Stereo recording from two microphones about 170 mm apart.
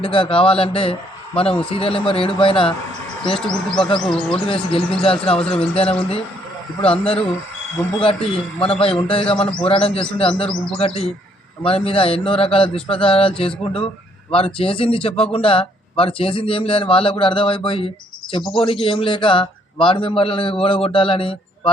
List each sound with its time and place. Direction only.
0.0 s speech: 30° left (ahead or behind)
3.3 s speech: 5° left (ahead or behind)
4.4 s speech: 30° left (ahead or behind)